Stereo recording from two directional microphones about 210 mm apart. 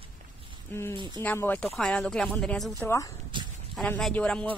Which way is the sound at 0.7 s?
10° left (ahead or behind).